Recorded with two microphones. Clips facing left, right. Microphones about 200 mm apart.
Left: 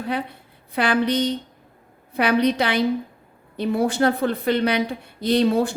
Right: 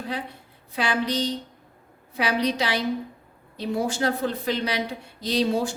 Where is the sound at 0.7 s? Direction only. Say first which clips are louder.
Left 5 dB; 60° left (ahead or behind).